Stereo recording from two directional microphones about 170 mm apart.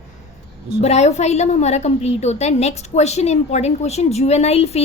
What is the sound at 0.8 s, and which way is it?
A woman's voice, 40° left (ahead or behind).